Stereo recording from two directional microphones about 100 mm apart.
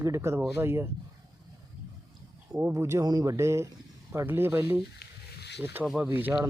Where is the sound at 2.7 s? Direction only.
30° right (ahead or behind).